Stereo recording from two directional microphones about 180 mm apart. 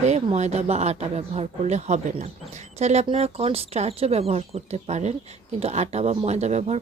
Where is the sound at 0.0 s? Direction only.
40° right (ahead or behind).